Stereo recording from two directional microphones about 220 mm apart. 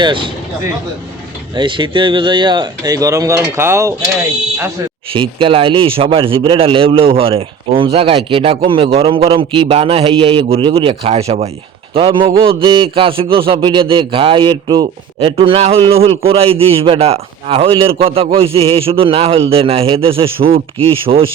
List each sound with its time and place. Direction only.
0.0 s speech: 20° right (ahead or behind)
5.1 s speech: 25° right (ahead or behind)